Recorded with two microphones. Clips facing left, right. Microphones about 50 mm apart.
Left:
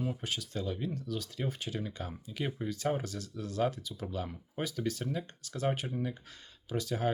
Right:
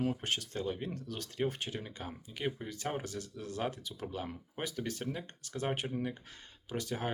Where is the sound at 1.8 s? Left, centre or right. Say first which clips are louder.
Left 4 dB; right.